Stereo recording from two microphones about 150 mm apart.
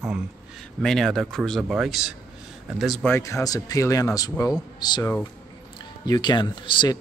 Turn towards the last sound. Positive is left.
turn(degrees=30)  # may be behind; listen again after turning